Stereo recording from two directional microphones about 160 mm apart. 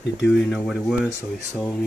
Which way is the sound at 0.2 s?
Centre (ahead or behind).